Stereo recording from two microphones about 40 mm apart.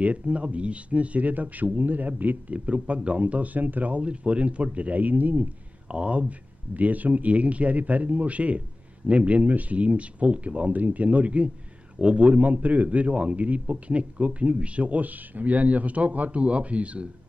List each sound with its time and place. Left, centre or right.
0.0 s speech: right
2.5 s speech: right
5.9 s speech: right